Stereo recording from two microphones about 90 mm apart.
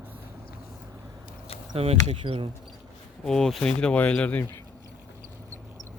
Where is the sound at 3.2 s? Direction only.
5° left (ahead or behind).